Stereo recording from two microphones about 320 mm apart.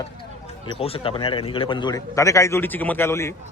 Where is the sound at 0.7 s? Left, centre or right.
Centre.